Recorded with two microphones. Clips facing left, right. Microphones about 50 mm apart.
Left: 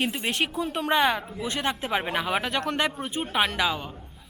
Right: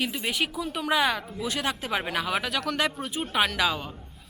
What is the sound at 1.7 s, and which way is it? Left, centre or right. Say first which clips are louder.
Speech: left 2 dB; centre.